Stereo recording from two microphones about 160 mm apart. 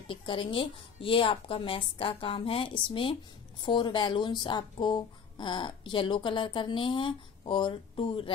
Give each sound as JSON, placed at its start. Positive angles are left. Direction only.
{"t": 0.1, "sound": "a woman's voice", "side_deg": 35}